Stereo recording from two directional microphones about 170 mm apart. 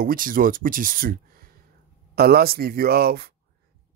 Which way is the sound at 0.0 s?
55° right (ahead or behind).